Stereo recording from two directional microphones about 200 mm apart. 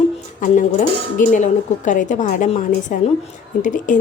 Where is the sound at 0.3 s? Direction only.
40° left (ahead or behind).